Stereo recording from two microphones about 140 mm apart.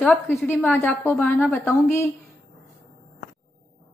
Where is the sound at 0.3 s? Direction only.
15° left (ahead or behind).